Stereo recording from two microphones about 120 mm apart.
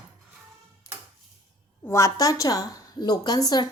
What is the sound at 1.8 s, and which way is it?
A woman's voice, 25° left (ahead or behind).